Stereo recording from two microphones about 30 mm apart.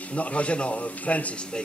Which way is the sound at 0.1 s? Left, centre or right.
Left.